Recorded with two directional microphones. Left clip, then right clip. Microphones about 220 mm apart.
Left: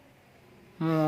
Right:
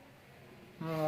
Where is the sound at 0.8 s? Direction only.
50° left (ahead or behind).